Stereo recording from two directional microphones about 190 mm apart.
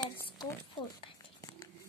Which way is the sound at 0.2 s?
15° left (ahead or behind).